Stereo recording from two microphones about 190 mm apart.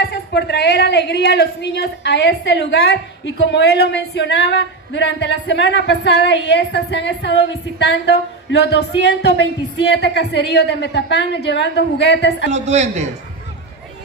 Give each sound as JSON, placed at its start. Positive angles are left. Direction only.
{"t": 0.1, "sound": "a woman's voice", "side_deg": 60}
{"t": 12.4, "sound": "a man's voice", "side_deg": -35}